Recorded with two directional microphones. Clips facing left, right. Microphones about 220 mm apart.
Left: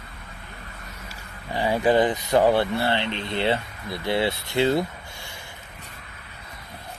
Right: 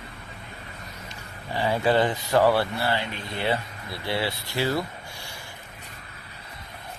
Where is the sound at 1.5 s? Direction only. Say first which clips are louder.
Left 2 dB; 15° left (ahead or behind).